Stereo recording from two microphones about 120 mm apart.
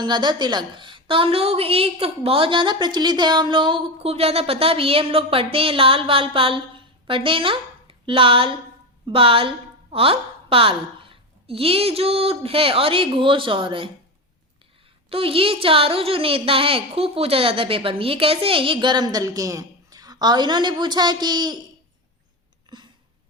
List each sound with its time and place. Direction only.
0.0 s a woman's voice: 40° right (ahead or behind)
15.1 s a woman's voice: 50° right (ahead or behind)
22.7 s a sound: 35° right (ahead or behind)